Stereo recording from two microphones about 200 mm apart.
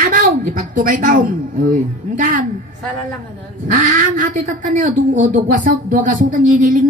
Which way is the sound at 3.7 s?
40° right (ahead or behind).